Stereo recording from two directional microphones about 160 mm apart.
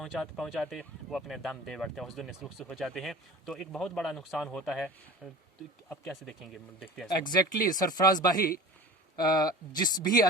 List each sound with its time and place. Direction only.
0.0 s speech: centre (ahead or behind)
7.3 s speech: 25° left (ahead or behind)